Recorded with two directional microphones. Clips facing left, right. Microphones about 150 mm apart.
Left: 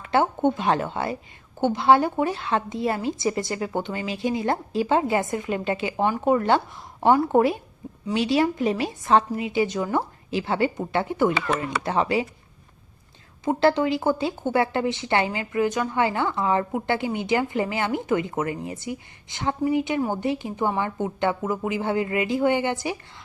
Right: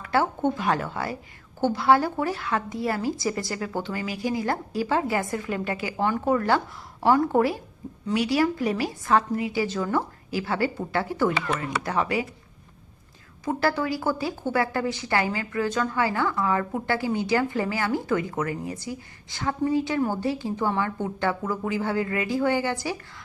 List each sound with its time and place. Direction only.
0.0 s a woman's voice: 20° left (ahead or behind)
13.4 s a woman's voice: 25° left (ahead or behind)